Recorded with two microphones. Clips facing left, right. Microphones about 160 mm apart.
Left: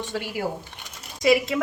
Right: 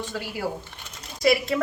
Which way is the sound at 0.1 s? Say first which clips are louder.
Left 2 dB; 20° left (ahead or behind).